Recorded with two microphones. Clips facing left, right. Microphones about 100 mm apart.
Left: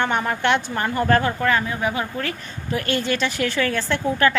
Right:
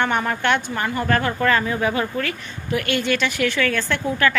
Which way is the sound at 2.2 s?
30° left (ahead or behind).